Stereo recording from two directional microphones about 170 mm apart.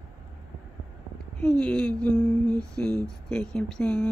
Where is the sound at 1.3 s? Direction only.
5° left (ahead or behind).